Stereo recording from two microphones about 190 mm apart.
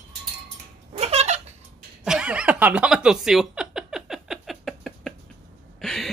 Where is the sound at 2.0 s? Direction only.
5° right (ahead or behind).